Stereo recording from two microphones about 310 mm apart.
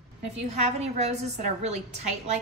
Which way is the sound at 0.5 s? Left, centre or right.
Right.